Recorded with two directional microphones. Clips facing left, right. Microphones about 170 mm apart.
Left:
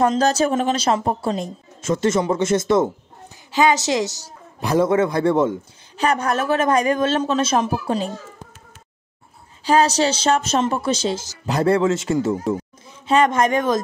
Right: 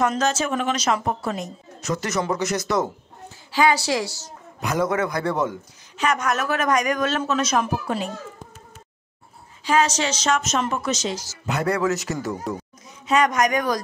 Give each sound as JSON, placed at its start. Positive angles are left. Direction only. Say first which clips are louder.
{"t": 0.0, "sound": "a man's voice", "louder": "left 5 dB", "side_deg": 35}
{"t": 9.7, "sound": "a woman's voice", "louder": "left 4 dB", "side_deg": 35}